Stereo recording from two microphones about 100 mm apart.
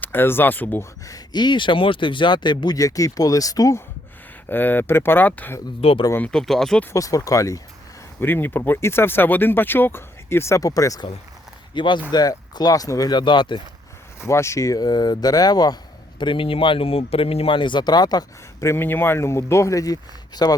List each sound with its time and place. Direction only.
0.0 s speech: 20° left (ahead or behind)
1.0 s speech: 40° left (ahead or behind)
4.4 s speech: 20° left (ahead or behind)
5.8 s speech: 75° left (ahead or behind)
6.2 s speech: 5° left (ahead or behind)
6.9 s speech: 35° left (ahead or behind)
8.2 s speech: 20° left (ahead or behind); by 11.0 s 35° left (ahead or behind)
11.7 s speech: 50° left (ahead or behind)
14.3 s speech: 30° left (ahead or behind)
18.6 s speech: 25° left (ahead or behind); by 20.5 s 40° left (ahead or behind)